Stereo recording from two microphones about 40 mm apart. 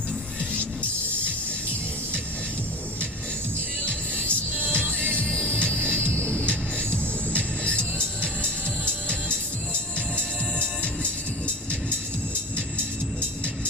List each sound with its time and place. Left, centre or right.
4.1 s music: right
5.1 s music: left
10.2 s music: left